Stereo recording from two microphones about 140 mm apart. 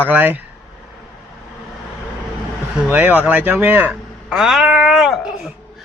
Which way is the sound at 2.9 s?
10° right (ahead or behind).